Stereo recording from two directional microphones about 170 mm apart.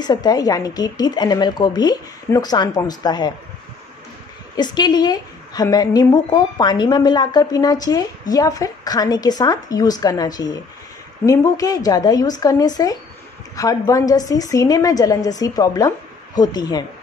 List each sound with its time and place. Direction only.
0.0 s a woman's voice: 25° left (ahead or behind)
4.6 s a woman's voice: 25° left (ahead or behind)